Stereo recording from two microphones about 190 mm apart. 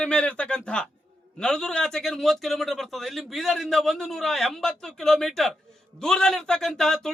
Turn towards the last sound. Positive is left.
turn(degrees=5)  # may be behind; listen again after turning